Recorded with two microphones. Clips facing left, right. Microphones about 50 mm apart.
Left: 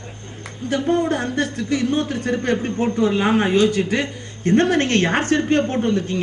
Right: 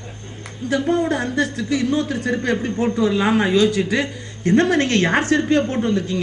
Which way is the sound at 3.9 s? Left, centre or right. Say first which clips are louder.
Right 1 dB; right.